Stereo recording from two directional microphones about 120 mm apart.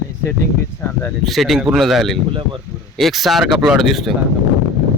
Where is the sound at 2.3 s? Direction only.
45° right (ahead or behind).